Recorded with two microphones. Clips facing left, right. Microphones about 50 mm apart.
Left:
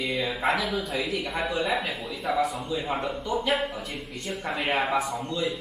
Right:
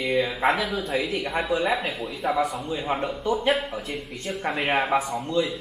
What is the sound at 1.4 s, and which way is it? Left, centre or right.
A man's voice, centre.